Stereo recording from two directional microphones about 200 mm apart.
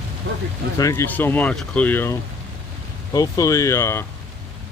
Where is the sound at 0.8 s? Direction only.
15° left (ahead or behind).